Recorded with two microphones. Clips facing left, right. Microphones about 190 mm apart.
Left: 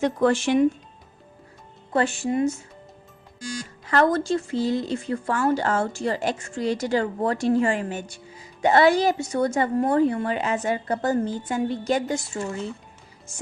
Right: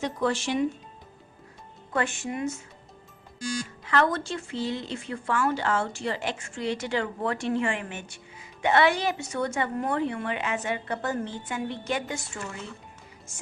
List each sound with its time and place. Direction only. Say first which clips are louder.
0.0 s speech: left 7 dB; 50° left (ahead or behind)
1.9 s a woman's voice: left 6 dB; 35° left (ahead or behind)
3.8 s a woman's voice: left 5 dB; 40° left (ahead or behind)